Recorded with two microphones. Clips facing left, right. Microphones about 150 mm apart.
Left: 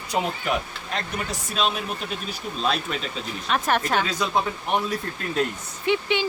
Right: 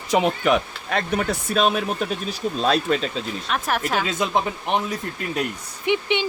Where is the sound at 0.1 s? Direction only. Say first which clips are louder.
Right 6 dB; 75° right (ahead or behind); by 3.1 s 40° right (ahead or behind).